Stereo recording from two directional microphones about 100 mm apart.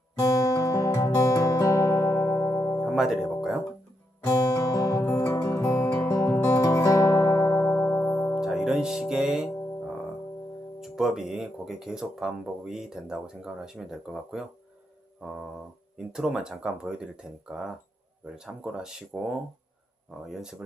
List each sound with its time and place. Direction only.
0.2 s music: 35° left (ahead or behind)
2.8 s music: 5° right (ahead or behind)
4.3 s music: 35° left (ahead or behind)
8.4 s music: 5° right (ahead or behind)
10.8 s speech: 5° right (ahead or behind)